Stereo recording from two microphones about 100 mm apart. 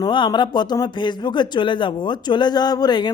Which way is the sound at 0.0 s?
45° left (ahead or behind).